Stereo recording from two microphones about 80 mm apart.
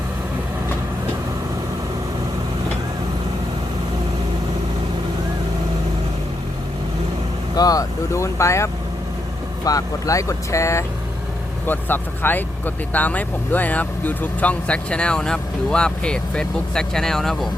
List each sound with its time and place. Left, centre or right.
7.5 s speech: left
11.6 s speech: left; by 17.5 s centre